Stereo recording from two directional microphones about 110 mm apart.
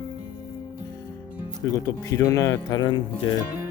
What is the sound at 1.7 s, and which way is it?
Speech, 30° left (ahead or behind).